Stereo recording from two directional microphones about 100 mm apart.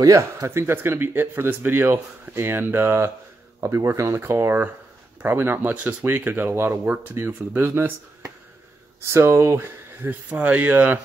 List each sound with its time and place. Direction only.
0.0 s speech: 35° right (ahead or behind); by 11.0 s 15° right (ahead or behind)